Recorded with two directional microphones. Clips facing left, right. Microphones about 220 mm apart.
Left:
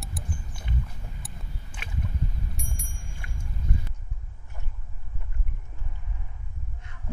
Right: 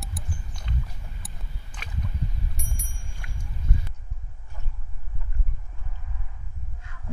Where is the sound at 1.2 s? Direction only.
Centre (ahead or behind).